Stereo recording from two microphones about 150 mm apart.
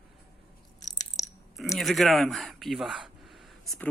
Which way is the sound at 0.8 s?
25° left (ahead or behind).